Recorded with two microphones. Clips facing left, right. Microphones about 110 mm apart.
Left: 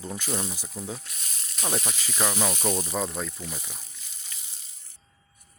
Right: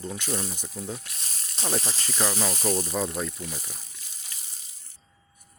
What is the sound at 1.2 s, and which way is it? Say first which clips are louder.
Sizzle: left 1 dB; 30° right (ahead or behind).